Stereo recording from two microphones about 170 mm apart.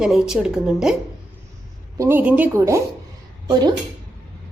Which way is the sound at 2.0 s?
10° right (ahead or behind).